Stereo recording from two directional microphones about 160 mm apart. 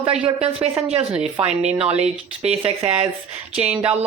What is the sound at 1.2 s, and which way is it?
Speech, 40° right (ahead or behind).